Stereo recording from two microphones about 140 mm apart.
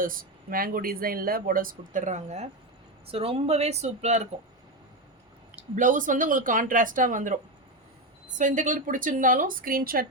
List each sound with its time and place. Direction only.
0.0 s speech: 85° right; by 2.5 s 55° right (ahead or behind)
3.1 s speech: 45° right (ahead or behind)
5.7 s speech: 65° right (ahead or behind)
8.4 s speech: 65° right (ahead or behind); by 10.1 s 90° right